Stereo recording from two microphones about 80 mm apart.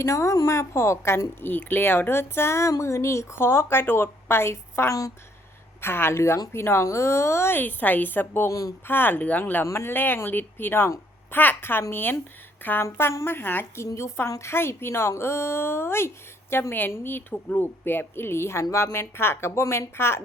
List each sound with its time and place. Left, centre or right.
0.0 s a woman's voice: left
8.4 s speech: left
8.9 s a woman's voice: left
13.8 s a woman's voice: left